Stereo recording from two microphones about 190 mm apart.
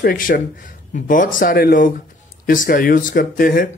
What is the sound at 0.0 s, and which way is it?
Speech, 50° left (ahead or behind).